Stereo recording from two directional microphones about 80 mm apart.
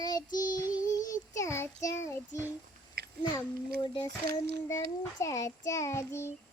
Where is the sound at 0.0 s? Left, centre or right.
Left.